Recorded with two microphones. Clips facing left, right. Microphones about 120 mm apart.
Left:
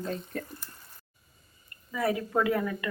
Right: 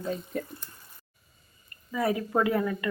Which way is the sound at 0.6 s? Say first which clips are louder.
Left 1 dB; 5° left (ahead or behind).